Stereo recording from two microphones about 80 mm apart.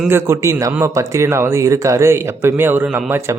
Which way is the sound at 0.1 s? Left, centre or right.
Right.